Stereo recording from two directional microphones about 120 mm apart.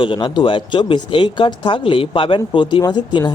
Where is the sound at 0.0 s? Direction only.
45° left (ahead or behind).